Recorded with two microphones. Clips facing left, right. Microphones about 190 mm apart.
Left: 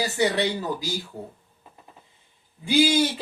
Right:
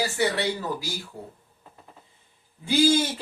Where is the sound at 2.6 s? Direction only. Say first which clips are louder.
Even; 15° left (ahead or behind).